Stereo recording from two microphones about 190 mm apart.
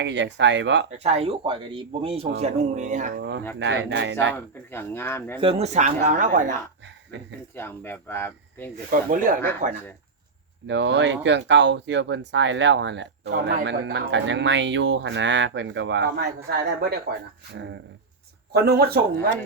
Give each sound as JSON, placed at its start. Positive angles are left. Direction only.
{"t": 0.0, "sound": "speech", "side_deg": -70}
{"t": 0.9, "sound": "speech", "side_deg": -35}
{"t": 3.2, "sound": "speech", "side_deg": -70}
{"t": 4.4, "sound": "speech", "side_deg": 10}
{"t": 5.4, "sound": "speech", "side_deg": -30}
{"t": 7.5, "sound": "speech", "side_deg": 10}
{"t": 8.9, "sound": "speech", "side_deg": -45}
{"t": 10.7, "sound": "speech", "side_deg": -70}
{"t": 18.5, "sound": "speech", "side_deg": -55}